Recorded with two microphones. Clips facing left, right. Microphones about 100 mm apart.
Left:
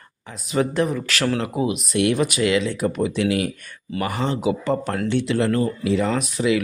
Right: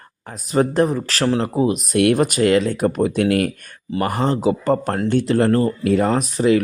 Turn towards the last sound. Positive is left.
turn(degrees=-40)  # may be behind; listen again after turning